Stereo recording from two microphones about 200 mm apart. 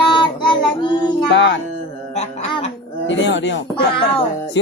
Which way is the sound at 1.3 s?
60° left (ahead or behind).